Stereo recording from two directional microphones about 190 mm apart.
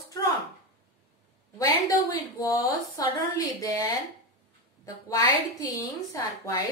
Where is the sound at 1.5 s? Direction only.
20° left (ahead or behind).